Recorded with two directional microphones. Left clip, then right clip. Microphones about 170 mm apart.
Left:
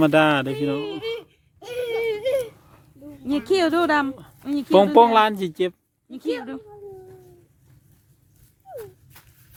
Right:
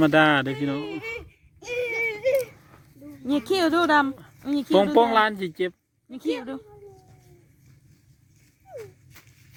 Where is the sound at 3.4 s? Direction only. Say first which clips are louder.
Left 2 dB; 35° right (ahead or behind).